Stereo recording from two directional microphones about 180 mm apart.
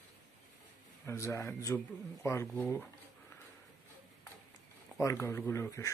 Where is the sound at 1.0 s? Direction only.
15° left (ahead or behind).